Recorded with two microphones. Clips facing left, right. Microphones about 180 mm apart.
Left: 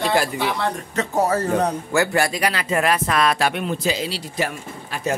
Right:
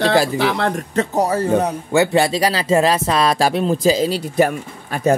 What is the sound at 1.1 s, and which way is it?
Speech, 15° right (ahead or behind).